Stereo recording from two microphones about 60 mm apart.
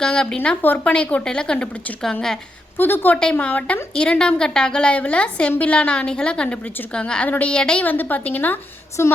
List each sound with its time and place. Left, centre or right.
0.0 s a woman's voice: centre
0.6 s a woman's voice: left
0.9 s a woman's voice: centre
2.7 s a woman's voice: left; by 7.9 s centre
7.9 s a woman's voice: left
9.0 s a woman's voice: left